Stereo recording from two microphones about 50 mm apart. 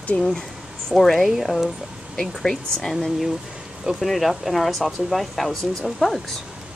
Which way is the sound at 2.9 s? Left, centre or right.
Centre.